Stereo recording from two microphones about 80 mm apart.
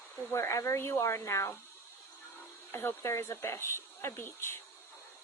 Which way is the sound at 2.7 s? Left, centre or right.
Left.